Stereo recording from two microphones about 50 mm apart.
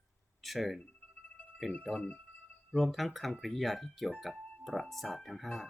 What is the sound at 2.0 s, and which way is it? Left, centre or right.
Speech, left.